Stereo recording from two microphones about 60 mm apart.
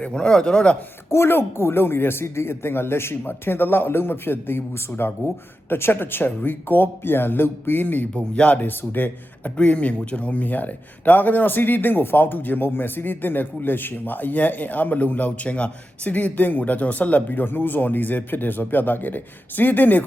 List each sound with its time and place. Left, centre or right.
0.1 s speech: centre
1.1 s speech: left
8.1 s speech: left
9.6 s speech: left